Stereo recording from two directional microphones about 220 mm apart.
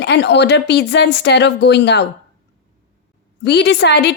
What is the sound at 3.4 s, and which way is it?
Speech, 50° left (ahead or behind).